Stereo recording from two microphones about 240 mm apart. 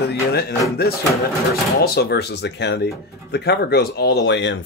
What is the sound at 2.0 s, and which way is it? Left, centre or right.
Speech, left.